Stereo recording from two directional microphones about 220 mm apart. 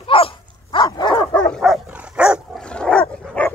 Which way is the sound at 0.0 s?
25° left (ahead or behind).